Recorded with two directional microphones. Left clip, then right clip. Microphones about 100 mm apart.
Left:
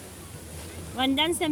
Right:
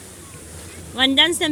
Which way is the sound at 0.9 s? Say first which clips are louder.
Right 9 dB; 25° right (ahead or behind).